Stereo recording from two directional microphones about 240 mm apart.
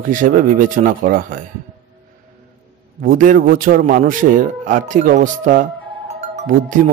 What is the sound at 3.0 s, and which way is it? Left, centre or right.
A man's voice, right.